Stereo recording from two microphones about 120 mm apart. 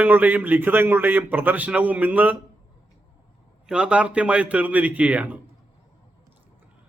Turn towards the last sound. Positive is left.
turn(degrees=-15)  # may be behind; listen again after turning